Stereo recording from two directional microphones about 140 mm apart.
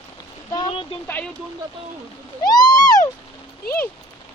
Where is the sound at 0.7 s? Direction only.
40° left (ahead or behind).